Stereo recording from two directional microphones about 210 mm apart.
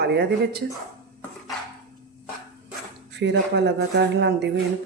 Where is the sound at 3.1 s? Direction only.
55° right (ahead or behind).